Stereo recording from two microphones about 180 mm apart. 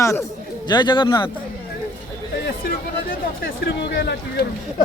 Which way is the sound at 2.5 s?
60° left (ahead or behind).